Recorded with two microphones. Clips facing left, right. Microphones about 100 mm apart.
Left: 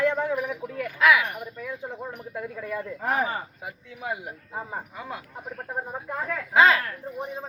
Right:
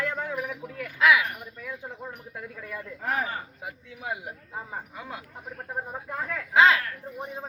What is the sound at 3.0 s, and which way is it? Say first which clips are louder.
Speech: left 3 dB; 20° left (ahead or behind).